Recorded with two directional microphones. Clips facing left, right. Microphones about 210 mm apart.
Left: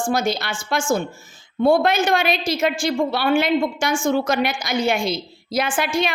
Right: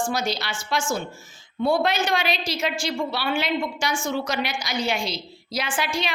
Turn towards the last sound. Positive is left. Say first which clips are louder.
# left 6 dB
turn(degrees=50)  # may be behind; listen again after turning